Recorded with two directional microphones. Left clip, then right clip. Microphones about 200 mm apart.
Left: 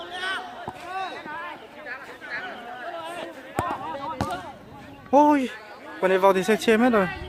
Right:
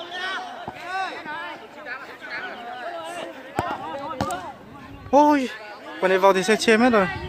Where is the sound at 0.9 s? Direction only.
20° right (ahead or behind).